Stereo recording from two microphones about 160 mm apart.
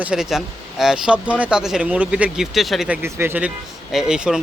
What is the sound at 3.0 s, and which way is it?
Speech, 15° right (ahead or behind).